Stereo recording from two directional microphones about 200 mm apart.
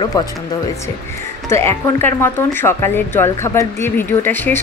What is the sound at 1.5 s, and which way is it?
Speech, 10° left (ahead or behind).